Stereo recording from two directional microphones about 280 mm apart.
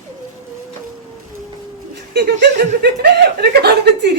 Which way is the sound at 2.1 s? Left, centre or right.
Right.